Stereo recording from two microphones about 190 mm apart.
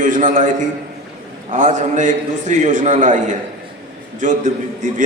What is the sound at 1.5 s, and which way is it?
A man's voice, 40° right (ahead or behind).